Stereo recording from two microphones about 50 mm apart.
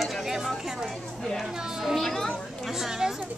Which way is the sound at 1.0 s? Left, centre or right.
Centre.